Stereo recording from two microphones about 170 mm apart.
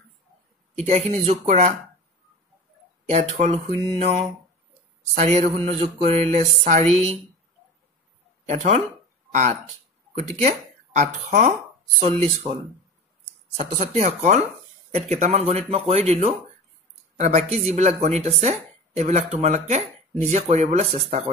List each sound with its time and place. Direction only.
0.8 s speech: 40° right (ahead or behind)
3.1 s speech: 45° right (ahead or behind)
8.5 s speech: 45° right (ahead or behind)
13.6 s speech: 45° right (ahead or behind)